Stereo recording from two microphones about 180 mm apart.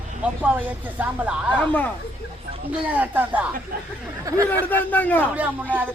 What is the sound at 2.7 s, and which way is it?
Speech, 10° right (ahead or behind).